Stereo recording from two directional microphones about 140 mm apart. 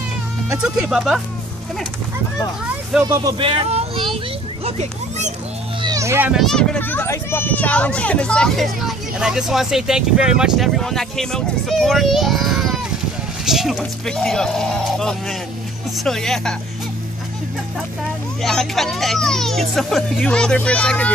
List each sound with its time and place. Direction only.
0.6 s speech: 5° right (ahead or behind)
3.0 s speech: 25° right (ahead or behind)
3.3 s speech: 40° right (ahead or behind)
4.6 s a child's voice: 50° right (ahead or behind)
5.8 s music: 25° right (ahead or behind)
6.3 s speech: 5° left (ahead or behind)
18.4 s speech: centre (ahead or behind)